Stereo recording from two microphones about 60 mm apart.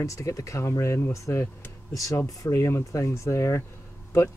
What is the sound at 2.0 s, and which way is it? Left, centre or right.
Speech, left.